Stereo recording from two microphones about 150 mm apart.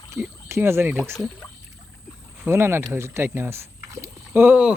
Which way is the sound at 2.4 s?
15° right (ahead or behind).